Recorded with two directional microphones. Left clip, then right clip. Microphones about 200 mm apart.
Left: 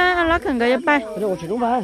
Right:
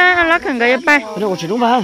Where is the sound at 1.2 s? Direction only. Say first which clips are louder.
Right 5 dB; 60° right (ahead or behind).